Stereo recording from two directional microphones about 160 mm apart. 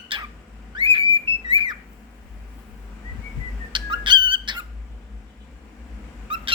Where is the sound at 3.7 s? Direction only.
30° right (ahead or behind).